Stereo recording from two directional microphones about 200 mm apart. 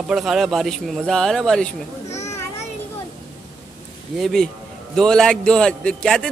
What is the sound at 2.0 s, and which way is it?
Children playing, 35° left (ahead or behind).